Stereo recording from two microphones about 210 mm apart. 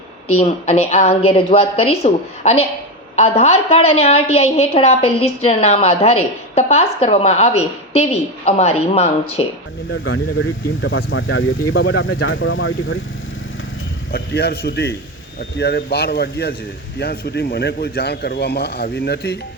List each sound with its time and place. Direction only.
0.3 s a woman's voice: 30° left (ahead or behind)
9.9 s speech: 70° left (ahead or behind)
14.1 s a man's voice: 50° left (ahead or behind)